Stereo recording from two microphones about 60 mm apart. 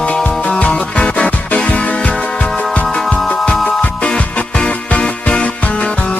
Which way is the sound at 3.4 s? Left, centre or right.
Centre.